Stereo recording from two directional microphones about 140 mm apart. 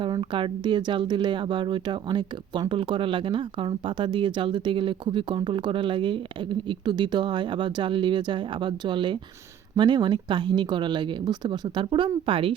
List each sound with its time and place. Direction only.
0.0 s speech: 35° right (ahead or behind)